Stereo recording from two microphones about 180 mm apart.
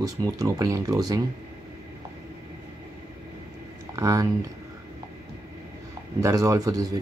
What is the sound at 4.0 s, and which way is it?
Speech, 20° right (ahead or behind).